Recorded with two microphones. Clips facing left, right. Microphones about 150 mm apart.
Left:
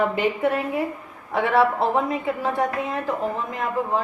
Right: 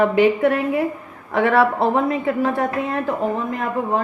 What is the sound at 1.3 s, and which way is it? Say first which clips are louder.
A woman's voice: right 3 dB; 65° right (ahead or behind).